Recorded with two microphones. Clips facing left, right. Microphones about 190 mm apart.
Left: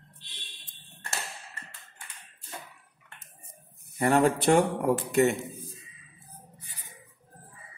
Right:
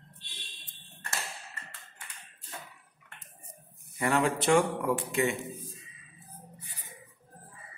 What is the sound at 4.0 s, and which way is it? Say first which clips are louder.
A man's voice: left 5 dB; 40° left (ahead or behind).